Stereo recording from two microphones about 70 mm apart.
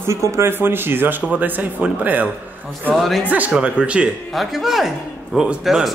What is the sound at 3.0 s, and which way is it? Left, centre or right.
Speech, centre.